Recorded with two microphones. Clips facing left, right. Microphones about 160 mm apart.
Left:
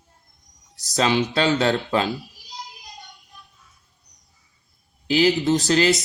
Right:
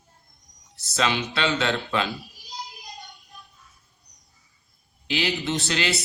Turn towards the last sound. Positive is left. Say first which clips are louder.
# left 8 dB
turn(degrees=40)  # may be behind; listen again after turning